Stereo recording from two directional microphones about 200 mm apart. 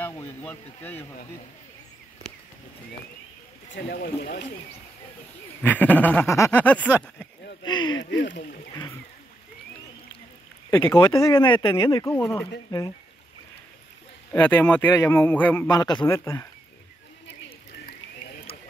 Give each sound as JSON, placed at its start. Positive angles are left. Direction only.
{"t": 0.0, "sound": "a sound", "side_deg": 10}
{"t": 3.7, "sound": "speech", "side_deg": 55}
{"t": 5.6, "sound": "a man's voice", "side_deg": 10}
{"t": 7.6, "sound": "speech", "side_deg": 20}
{"t": 8.0, "sound": "speech", "side_deg": 65}
{"t": 10.7, "sound": "speech", "side_deg": 10}
{"t": 14.3, "sound": "a man's voice", "side_deg": 5}